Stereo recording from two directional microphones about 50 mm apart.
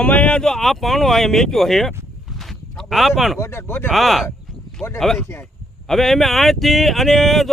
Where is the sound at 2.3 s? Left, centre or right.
Centre.